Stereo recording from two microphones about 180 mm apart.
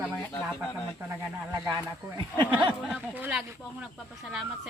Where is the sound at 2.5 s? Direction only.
10° right (ahead or behind).